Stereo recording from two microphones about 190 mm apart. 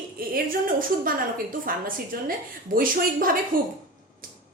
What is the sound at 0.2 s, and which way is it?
Speech, 50° right (ahead or behind).